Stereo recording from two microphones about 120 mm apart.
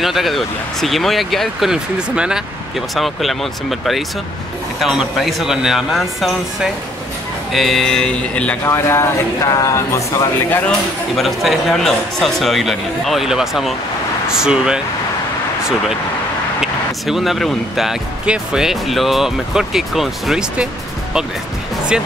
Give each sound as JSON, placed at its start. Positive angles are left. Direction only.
{"t": 0.0, "sound": "speech", "side_deg": 0}
{"t": 4.7, "sound": "speech", "side_deg": -5}
{"t": 8.6, "sound": "speech", "side_deg": 20}
{"t": 11.1, "sound": "speech", "side_deg": 0}
{"t": 17.0, "sound": "speech", "side_deg": 0}